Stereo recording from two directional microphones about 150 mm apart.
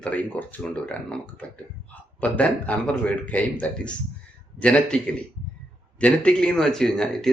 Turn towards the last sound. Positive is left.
turn(degrees=5)  # may be behind; listen again after turning